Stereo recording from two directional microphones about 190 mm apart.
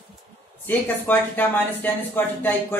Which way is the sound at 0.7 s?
10° left (ahead or behind).